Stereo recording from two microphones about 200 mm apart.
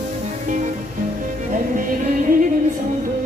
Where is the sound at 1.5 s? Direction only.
40° right (ahead or behind).